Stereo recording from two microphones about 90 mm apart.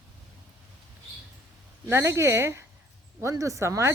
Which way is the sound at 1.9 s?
30° right (ahead or behind).